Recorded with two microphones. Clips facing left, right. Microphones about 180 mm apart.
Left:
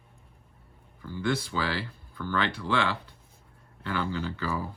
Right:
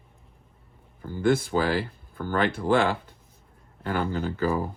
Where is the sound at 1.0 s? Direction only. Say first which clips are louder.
Right 6 dB; 50° right (ahead or behind).